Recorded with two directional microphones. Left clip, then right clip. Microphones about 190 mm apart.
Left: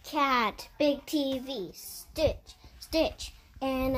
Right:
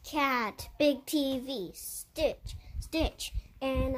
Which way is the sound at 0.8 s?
30° right (ahead or behind).